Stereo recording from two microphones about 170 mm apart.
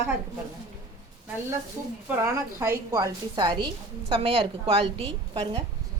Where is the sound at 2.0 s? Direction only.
15° right (ahead or behind); by 5.6 s 30° right (ahead or behind).